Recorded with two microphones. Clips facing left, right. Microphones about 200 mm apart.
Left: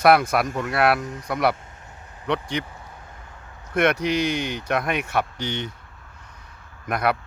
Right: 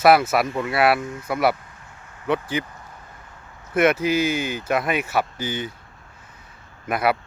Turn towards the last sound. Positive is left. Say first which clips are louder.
# right 2 dB
turn(degrees=-5)  # may be behind; listen again after turning